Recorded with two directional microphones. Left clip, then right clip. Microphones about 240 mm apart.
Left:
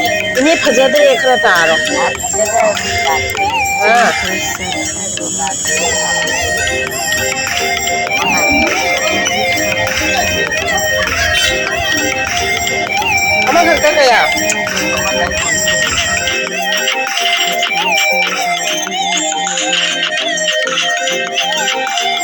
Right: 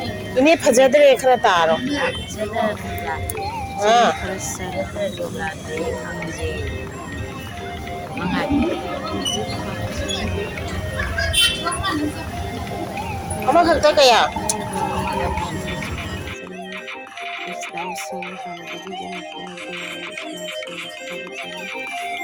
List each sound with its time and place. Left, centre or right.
0.4 s speech: centre
3.8 s speech: centre
13.5 s speech: centre